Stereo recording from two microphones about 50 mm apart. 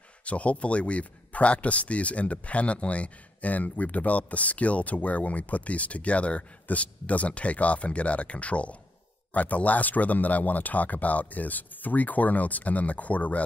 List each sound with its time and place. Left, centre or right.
0.2 s speech: left